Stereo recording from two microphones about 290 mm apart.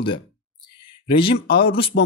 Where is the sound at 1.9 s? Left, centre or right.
Left.